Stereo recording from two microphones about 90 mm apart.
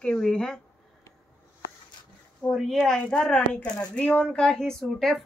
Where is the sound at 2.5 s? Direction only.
Centre (ahead or behind).